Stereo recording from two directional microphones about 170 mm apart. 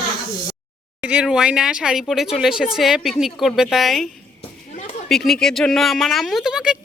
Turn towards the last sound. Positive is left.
turn(degrees=-5)  # may be behind; listen again after turning